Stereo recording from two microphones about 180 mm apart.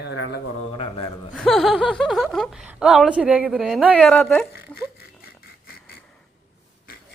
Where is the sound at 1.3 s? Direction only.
Centre (ahead or behind).